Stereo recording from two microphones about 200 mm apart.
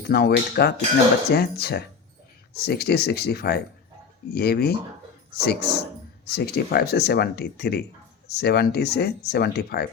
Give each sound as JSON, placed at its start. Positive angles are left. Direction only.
{"t": 0.1, "sound": "speech", "side_deg": 55}